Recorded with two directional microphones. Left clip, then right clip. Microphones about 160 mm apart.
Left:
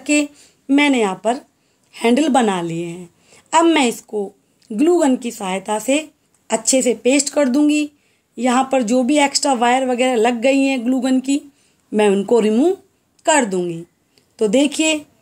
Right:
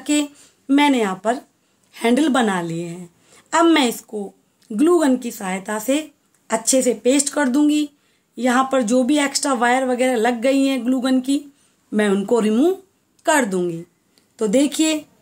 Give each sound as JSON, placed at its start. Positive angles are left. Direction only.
{"t": 0.0, "sound": "a woman's voice", "side_deg": 15}